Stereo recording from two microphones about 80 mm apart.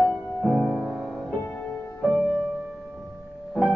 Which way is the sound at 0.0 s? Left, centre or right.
Centre.